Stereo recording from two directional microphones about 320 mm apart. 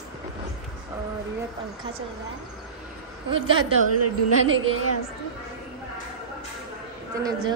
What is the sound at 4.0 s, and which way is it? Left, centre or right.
A woman's voice, right.